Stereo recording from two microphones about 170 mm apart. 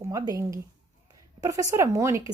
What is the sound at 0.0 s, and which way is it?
A woman's voice, 20° right (ahead or behind).